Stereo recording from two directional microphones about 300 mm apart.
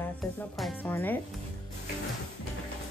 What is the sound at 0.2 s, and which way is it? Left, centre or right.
Speech, centre.